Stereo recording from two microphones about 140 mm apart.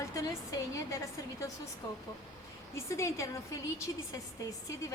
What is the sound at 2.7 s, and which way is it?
Speech, 20° left (ahead or behind).